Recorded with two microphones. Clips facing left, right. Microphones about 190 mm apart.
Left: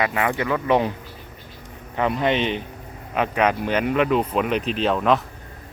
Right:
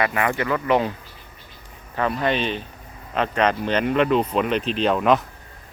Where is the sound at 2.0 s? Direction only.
20° left (ahead or behind).